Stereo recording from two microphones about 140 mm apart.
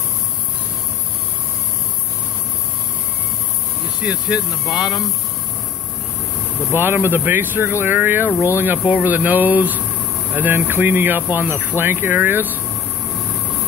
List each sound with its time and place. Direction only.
4.0 s speech: 5° right (ahead or behind)
6.7 s speech: 15° right (ahead or behind)